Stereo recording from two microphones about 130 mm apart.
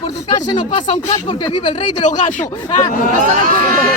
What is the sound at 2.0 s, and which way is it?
Speech, 75° left (ahead or behind).